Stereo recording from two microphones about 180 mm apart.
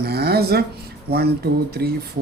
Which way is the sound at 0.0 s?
60° right (ahead or behind).